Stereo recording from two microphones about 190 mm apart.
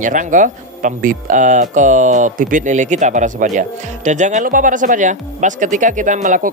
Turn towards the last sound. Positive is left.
turn(degrees=-40)  # may be behind; listen again after turning